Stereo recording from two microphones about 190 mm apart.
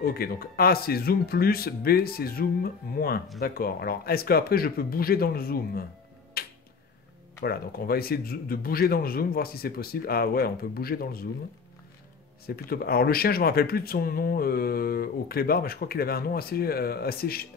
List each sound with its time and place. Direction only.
0.0 s speech: 50° left (ahead or behind)
6.4 s music: 55° left (ahead or behind)
7.4 s speech: 50° left (ahead or behind)
12.4 s speech: 55° left (ahead or behind)